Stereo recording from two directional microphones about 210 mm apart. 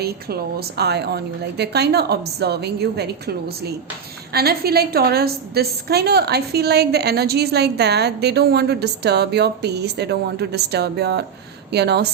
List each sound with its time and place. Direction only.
0.8 s a woman's voice: 50° right (ahead or behind)